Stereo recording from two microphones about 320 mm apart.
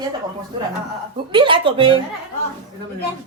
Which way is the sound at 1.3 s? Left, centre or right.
Centre.